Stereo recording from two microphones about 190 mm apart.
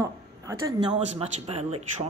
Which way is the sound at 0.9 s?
35° right (ahead or behind).